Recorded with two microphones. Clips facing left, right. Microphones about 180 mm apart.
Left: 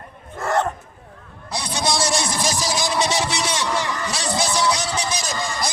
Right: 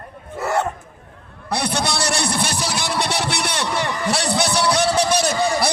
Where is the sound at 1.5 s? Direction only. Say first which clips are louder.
Right 2 dB; 60° right (ahead or behind).